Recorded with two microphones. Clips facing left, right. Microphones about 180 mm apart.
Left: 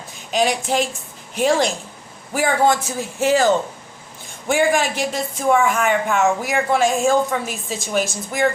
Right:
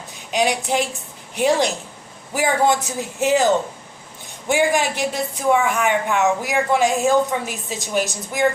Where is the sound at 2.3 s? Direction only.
20° right (ahead or behind).